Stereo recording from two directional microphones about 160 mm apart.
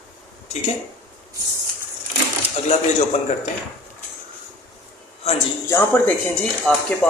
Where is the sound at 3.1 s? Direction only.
40° left (ahead or behind).